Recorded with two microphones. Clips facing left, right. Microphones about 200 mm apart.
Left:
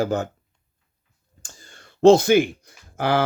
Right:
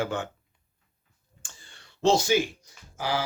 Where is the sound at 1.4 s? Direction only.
40° left (ahead or behind).